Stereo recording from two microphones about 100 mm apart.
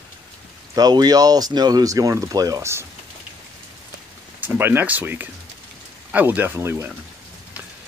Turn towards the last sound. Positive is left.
turn(degrees=-25)  # may be behind; listen again after turning